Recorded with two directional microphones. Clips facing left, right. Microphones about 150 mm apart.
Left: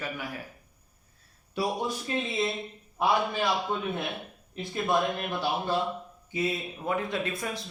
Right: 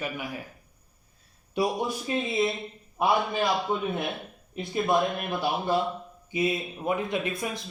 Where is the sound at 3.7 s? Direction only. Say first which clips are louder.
Right 3 dB; 10° right (ahead or behind).